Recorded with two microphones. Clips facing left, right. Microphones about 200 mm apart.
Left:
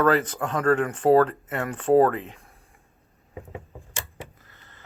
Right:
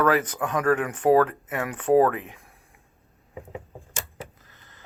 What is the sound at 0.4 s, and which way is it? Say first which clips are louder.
Speech: even; 25° left (ahead or behind).